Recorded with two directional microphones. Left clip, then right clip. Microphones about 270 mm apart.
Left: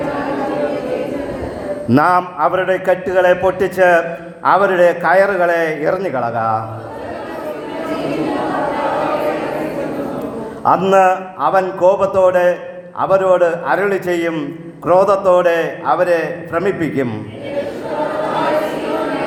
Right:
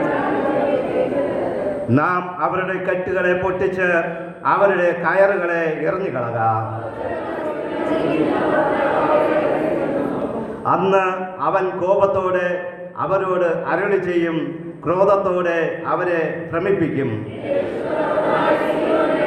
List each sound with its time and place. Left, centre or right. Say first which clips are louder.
1.9 s a man's voice: left 8 dB; left
10.7 s a man's voice: left 6 dB; left